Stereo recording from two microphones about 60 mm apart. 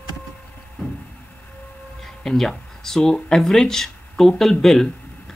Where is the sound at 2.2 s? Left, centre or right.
Centre.